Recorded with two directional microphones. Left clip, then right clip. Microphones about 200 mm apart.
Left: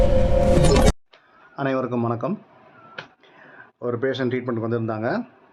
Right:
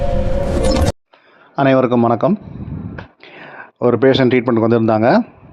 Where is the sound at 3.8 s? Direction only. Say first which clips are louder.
Right 12 dB; 40° right (ahead or behind).